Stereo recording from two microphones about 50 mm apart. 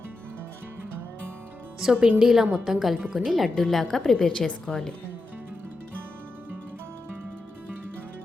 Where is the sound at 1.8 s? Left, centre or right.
Centre.